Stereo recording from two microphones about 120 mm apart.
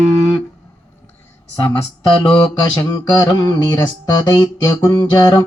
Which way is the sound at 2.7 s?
35° left (ahead or behind).